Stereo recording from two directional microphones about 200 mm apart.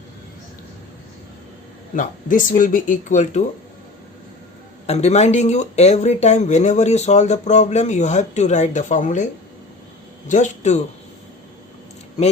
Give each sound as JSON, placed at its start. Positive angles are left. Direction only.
{"t": 2.0, "sound": "speech", "side_deg": 40}
{"t": 4.9, "sound": "speech", "side_deg": 35}
{"t": 10.2, "sound": "speech", "side_deg": 35}